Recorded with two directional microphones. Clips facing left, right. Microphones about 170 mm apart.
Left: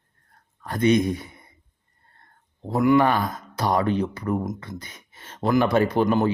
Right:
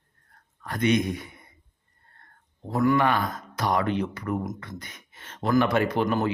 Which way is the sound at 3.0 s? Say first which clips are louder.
Left 3 dB; 35° left (ahead or behind).